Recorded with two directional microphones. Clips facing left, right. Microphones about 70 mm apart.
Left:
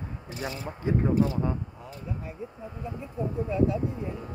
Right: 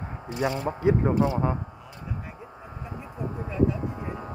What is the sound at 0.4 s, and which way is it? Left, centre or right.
Speech, right.